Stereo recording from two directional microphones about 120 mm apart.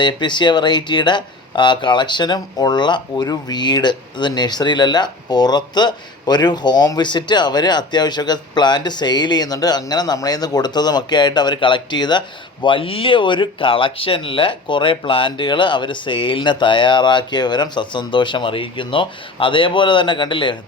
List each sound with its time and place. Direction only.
0.0 s speech: 40° left (ahead or behind)